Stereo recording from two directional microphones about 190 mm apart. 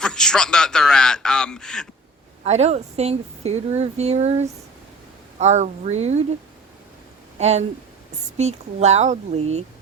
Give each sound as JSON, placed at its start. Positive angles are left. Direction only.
{"t": 0.0, "sound": "a man's voice", "side_deg": 5}
{"t": 2.4, "sound": "speech", "side_deg": -35}
{"t": 7.3, "sound": "speech", "side_deg": -35}